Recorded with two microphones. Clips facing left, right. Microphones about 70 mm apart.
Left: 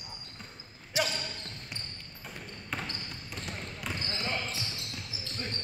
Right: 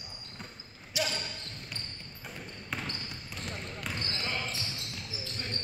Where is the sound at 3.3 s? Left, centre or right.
Centre.